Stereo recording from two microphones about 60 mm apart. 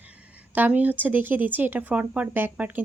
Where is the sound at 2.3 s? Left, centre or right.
Right.